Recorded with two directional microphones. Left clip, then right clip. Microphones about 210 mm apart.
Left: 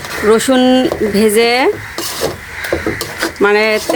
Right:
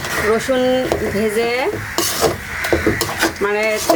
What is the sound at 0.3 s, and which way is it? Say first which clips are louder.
Speech: left 6 dB; 55° left (ahead or behind).